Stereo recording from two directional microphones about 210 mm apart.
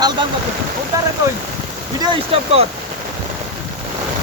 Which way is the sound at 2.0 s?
30° right (ahead or behind).